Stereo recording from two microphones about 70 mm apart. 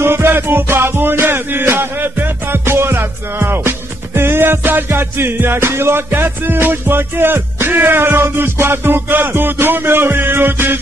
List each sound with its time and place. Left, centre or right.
0.0 s music: right